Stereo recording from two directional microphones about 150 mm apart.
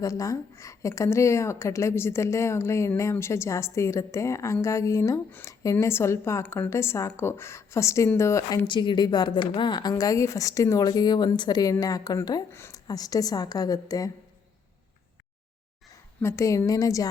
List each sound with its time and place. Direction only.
0.0 s a woman's voice: 20° left (ahead or behind)
16.2 s a woman's voice: 20° left (ahead or behind)